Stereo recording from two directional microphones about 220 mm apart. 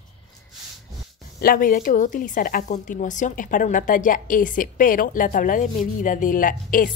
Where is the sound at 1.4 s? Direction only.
40° left (ahead or behind).